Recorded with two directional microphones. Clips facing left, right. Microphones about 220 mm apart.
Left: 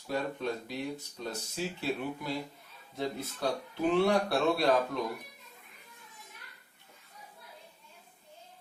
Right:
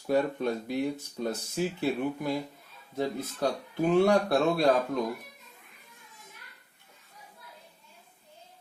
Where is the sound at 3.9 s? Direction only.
45° right (ahead or behind).